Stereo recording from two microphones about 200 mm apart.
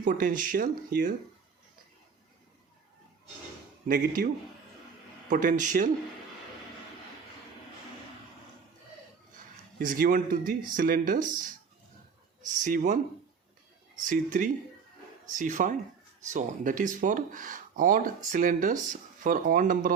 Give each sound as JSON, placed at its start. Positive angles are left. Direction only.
{"t": 0.0, "sound": "speech", "side_deg": -40}
{"t": 3.8, "sound": "speech", "side_deg": -45}
{"t": 5.3, "sound": "speech", "side_deg": -40}
{"t": 9.7, "sound": "speech", "side_deg": -45}
{"t": 14.0, "sound": "speech", "side_deg": -40}